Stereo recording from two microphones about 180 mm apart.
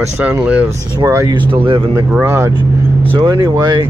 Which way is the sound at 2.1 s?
15° right (ahead or behind).